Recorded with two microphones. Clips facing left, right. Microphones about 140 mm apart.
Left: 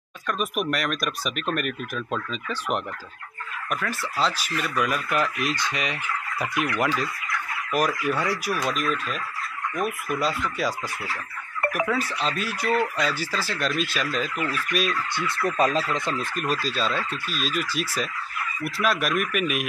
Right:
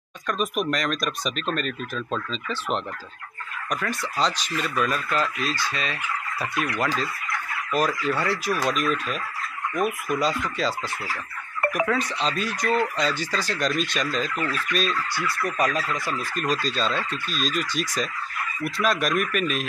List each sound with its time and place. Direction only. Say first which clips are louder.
0.3 s speech: right 1 dB; 5° left (ahead or behind)
3.8 s speech: right 1 dB; 5° left (ahead or behind)
8.6 s speech: right 2 dB; centre (ahead or behind)
11.7 s speech: right 1 dB; 5° left (ahead or behind)
15.1 s speech: left 4 dB; 25° left (ahead or behind)
16.3 s speech: right 4 dB; 10° left (ahead or behind)